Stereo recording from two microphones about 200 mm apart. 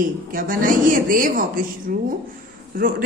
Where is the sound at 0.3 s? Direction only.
45° right (ahead or behind).